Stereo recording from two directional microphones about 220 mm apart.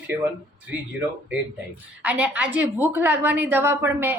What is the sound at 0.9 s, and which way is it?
A woman's voice, 5° right (ahead or behind).